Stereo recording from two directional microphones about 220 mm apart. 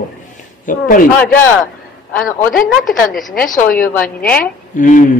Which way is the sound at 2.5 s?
40° left (ahead or behind).